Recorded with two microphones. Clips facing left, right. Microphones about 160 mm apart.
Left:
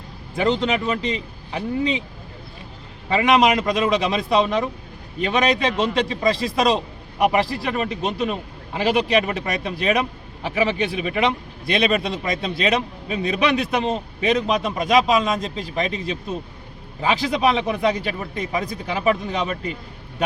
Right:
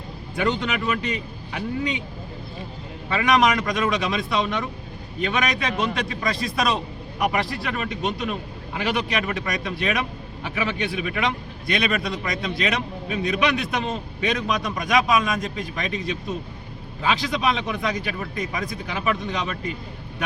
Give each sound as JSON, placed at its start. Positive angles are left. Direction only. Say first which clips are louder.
{"t": 0.3, "sound": "a man's voice", "louder": "left 4 dB", "side_deg": 30}
{"t": 3.1, "sound": "a man's voice", "louder": "left 3 dB", "side_deg": 25}